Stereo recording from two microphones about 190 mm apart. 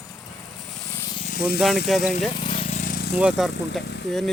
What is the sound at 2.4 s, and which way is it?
Vehicle, 30° left (ahead or behind).